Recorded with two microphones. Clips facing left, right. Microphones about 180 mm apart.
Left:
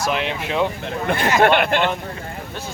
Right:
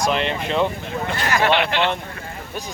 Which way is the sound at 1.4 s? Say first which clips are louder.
Left 2 dB; 50° left (ahead or behind).